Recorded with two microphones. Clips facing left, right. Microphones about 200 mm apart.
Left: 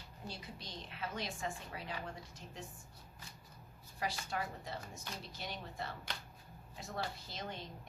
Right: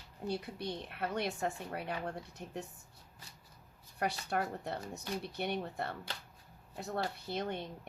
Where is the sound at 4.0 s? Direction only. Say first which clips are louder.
Right 5 dB; 60° right (ahead or behind).